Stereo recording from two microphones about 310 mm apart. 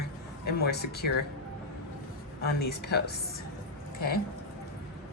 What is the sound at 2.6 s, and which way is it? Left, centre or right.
Speech, left.